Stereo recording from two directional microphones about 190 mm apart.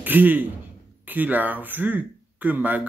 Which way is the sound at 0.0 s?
10° right (ahead or behind).